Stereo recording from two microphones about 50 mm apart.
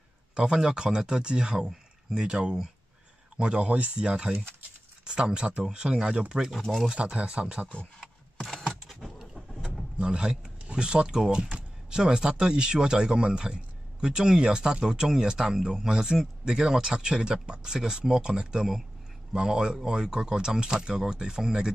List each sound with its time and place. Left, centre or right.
0.3 s speech: centre
6.5 s speech: centre
6.9 s speech: right
8.0 s a sound: centre
8.8 s vehicle: centre
9.9 s speech: centre